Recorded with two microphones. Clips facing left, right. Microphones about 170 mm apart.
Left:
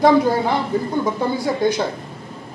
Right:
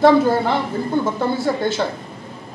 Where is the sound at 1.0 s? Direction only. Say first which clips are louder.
Even; 15° left (ahead or behind).